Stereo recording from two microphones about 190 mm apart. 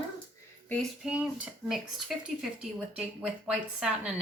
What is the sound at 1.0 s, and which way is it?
Speech, 5° right (ahead or behind).